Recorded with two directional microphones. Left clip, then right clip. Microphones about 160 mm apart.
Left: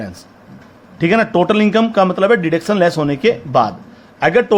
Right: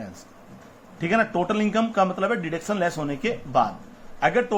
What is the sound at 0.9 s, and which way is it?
A man's voice, 50° left (ahead or behind).